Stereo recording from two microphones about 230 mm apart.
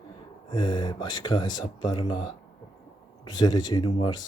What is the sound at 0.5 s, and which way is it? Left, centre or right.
Speech, centre.